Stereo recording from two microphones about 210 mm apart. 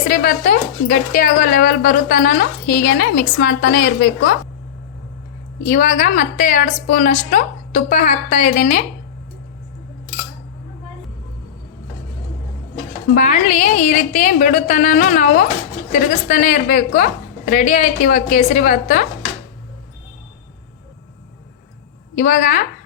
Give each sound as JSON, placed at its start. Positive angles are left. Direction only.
{"t": 0.1, "sound": "speech", "side_deg": 40}
{"t": 5.6, "sound": "speech", "side_deg": 35}
{"t": 13.1, "sound": "speech", "side_deg": 35}
{"t": 22.1, "sound": "speech", "side_deg": 40}